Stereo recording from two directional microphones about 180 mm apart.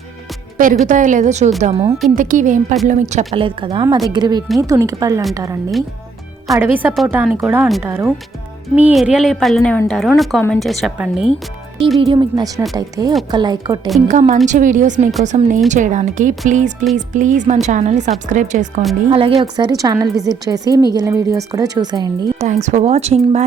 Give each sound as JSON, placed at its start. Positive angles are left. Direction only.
{"t": 0.5, "sound": "a woman's voice", "side_deg": -45}
{"t": 2.0, "sound": "speech", "side_deg": -45}
{"t": 3.3, "sound": "a woman's voice", "side_deg": -30}
{"t": 11.9, "sound": "a woman's voice", "side_deg": -30}
{"t": 14.1, "sound": "a woman's voice", "side_deg": -45}
{"t": 19.1, "sound": "a woman's voice", "side_deg": -30}
{"t": 19.5, "sound": "a woman's voice", "side_deg": -20}
{"t": 22.4, "sound": "a woman's voice", "side_deg": -40}